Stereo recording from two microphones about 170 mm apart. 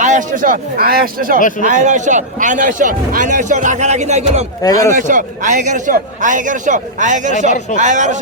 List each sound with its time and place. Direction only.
0.0 s a man's voice: 45° right (ahead or behind)
1.4 s a man's voice: 50° left (ahead or behind)
1.6 s a man's voice: 45° right (ahead or behind)
4.6 s speech: 20° left (ahead or behind)
4.9 s a man's voice: 50° right (ahead or behind)